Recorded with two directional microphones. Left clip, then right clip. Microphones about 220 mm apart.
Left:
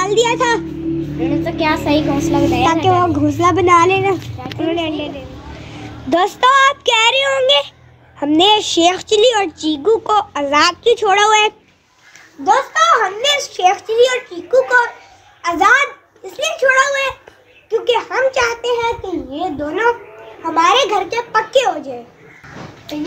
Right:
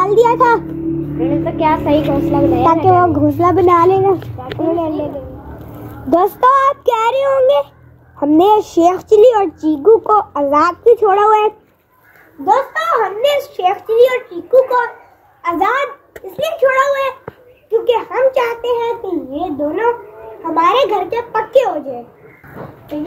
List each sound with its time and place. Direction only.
0.0 s a child's voice: 5° right (ahead or behind)
1.2 s a child's voice: 25° left (ahead or behind)
3.3 s speech: 5° right (ahead or behind)
4.5 s a child's voice: 25° left (ahead or behind)
6.0 s speech: 5° right (ahead or behind)
9.8 s a child's voice: 10° left (ahead or behind)
10.1 s a child's voice: centre (ahead or behind)